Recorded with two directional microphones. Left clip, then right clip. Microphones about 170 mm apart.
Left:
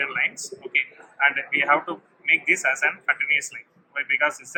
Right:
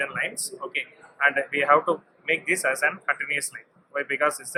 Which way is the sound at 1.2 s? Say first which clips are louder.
Left 1 dB; 40° right (ahead or behind).